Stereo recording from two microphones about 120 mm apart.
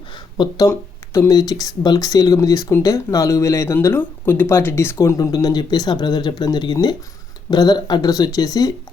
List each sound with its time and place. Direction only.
0.3 s speech: 30° left (ahead or behind)